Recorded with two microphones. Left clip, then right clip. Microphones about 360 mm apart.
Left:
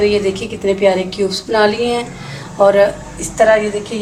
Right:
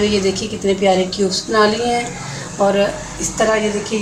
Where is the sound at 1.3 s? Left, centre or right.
Left.